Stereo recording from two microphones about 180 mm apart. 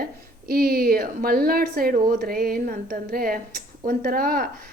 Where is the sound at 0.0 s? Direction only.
55° right (ahead or behind).